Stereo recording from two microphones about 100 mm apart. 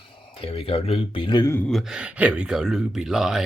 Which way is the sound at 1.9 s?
10° right (ahead or behind).